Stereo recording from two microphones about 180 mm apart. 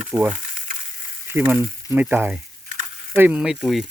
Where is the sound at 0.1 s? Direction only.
10° right (ahead or behind).